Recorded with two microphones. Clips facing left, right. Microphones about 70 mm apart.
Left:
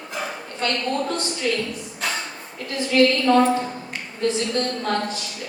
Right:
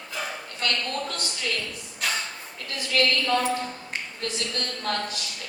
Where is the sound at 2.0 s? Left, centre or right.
Left.